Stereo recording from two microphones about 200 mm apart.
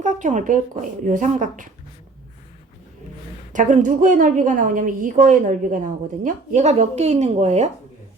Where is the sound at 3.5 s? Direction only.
40° right (ahead or behind).